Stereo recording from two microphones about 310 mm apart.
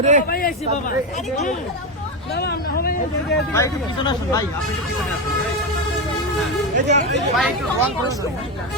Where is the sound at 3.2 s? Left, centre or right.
Centre.